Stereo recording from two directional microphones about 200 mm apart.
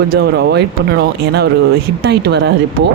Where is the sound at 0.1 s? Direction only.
55° right (ahead or behind).